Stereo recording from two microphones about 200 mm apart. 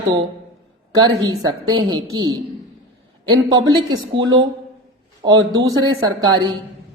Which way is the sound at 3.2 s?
25° right (ahead or behind).